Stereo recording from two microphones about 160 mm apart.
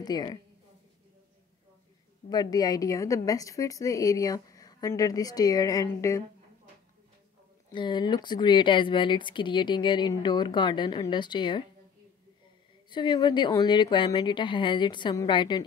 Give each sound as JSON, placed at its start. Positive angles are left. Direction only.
{"t": 0.0, "sound": "speech", "side_deg": 25}
{"t": 2.2, "sound": "speech", "side_deg": 25}
{"t": 7.7, "sound": "speech", "side_deg": 30}
{"t": 12.9, "sound": "speech", "side_deg": 30}